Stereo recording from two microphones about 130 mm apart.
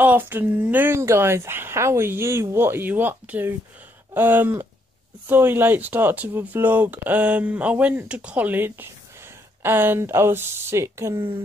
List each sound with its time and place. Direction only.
0.0 s speech: 15° right (ahead or behind)